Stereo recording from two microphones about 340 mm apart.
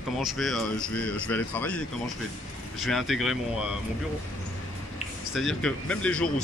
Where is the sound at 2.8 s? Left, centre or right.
Centre.